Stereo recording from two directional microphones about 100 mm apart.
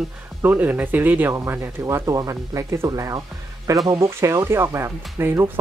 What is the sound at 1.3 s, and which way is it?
Speech, 25° right (ahead or behind).